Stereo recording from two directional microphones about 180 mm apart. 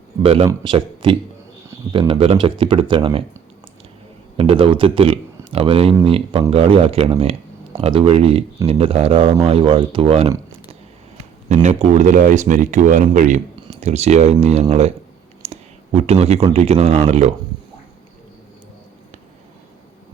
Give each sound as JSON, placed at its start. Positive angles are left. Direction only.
{"t": 0.2, "sound": "speech", "side_deg": -30}
{"t": 4.4, "sound": "speech", "side_deg": -30}